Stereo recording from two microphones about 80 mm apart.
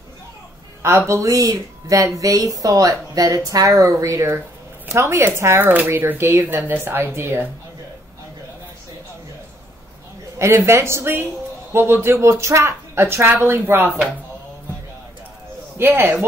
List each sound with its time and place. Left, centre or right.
0.8 s a woman's voice: right
10.4 s speech: right
15.8 s speech: right